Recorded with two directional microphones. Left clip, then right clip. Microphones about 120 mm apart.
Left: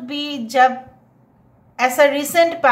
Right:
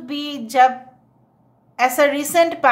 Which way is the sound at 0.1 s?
30° right (ahead or behind).